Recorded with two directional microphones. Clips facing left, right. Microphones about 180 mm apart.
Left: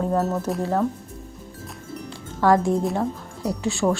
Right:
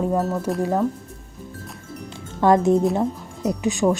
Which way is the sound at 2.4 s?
20° right (ahead or behind).